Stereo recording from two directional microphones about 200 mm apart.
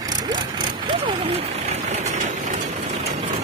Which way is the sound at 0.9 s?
30° right (ahead or behind).